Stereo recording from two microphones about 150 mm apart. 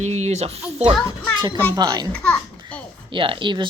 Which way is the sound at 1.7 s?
25° right (ahead or behind).